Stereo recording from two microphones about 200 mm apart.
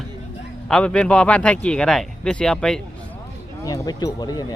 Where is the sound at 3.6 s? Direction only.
20° left (ahead or behind).